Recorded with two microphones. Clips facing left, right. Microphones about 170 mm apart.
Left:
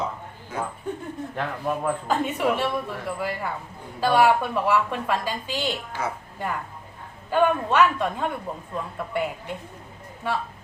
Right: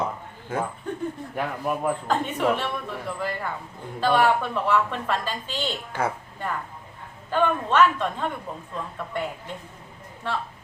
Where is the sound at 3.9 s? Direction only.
10° left (ahead or behind).